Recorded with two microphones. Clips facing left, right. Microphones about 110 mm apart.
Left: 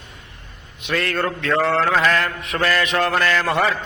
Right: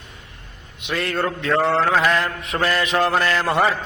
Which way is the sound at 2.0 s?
20° right (ahead or behind).